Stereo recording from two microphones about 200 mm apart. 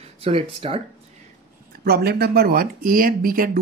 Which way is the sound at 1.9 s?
50° right (ahead or behind).